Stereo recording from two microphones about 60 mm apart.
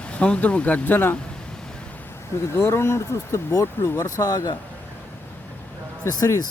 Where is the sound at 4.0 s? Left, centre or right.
Left.